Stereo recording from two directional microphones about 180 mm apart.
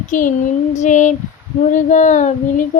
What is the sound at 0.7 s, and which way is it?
Female singing, 40° left (ahead or behind).